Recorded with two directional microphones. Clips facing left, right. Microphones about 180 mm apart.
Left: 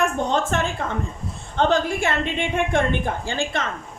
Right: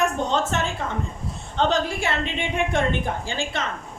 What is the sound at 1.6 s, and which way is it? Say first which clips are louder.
Speech: left 2 dB; 50° left (ahead or behind).